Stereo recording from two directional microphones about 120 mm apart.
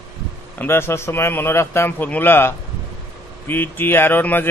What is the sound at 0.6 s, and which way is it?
A man's voice, 20° left (ahead or behind).